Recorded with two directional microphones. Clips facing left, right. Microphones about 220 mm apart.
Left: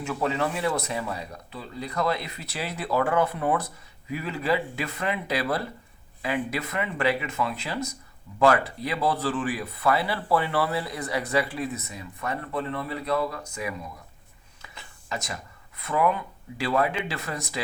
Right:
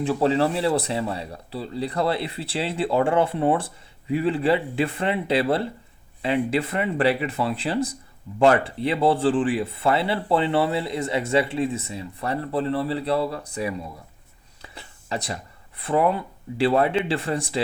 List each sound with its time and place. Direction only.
0.0 s speech: 30° right (ahead or behind)
14.6 s a sound: 30° right (ahead or behind)
15.8 s speech: 30° right (ahead or behind)